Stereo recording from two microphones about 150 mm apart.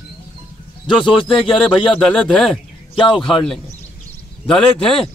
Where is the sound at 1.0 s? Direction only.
35° left (ahead or behind).